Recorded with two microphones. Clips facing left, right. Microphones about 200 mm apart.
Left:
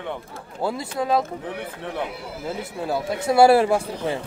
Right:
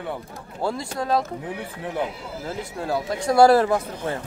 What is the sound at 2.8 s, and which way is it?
Speech, 5° left (ahead or behind).